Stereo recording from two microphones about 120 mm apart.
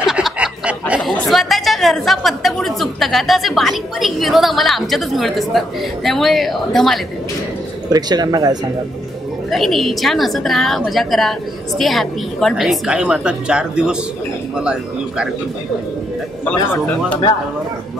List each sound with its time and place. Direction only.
0.0 s a sound: 5° right (ahead or behind)
1.0 s speech: centre (ahead or behind)
7.9 s speech: 35° right (ahead or behind)
9.5 s a woman's voice: centre (ahead or behind)
16.4 s speech: 10° left (ahead or behind)